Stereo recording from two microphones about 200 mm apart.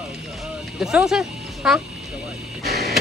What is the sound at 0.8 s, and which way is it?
Speech, 5° right (ahead or behind).